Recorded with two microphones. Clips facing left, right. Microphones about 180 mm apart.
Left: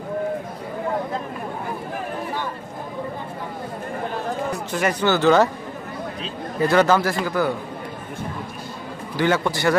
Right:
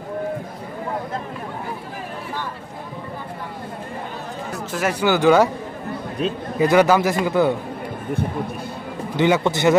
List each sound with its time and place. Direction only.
4.7 s a man's voice: 5° right (ahead or behind)
6.6 s a man's voice: 10° right (ahead or behind)
9.1 s a man's voice: 20° right (ahead or behind)